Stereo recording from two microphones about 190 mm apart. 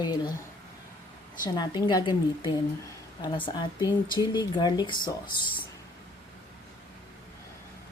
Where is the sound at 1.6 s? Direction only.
25° left (ahead or behind).